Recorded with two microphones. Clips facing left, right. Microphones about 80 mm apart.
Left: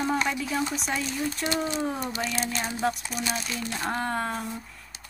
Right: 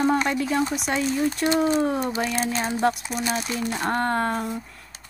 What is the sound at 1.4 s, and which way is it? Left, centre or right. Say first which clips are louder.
Speech: right 7 dB; centre.